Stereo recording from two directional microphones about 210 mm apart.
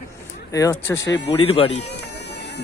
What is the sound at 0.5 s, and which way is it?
Speech, 15° left (ahead or behind).